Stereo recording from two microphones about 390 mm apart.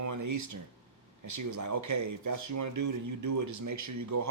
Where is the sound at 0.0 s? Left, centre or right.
Right.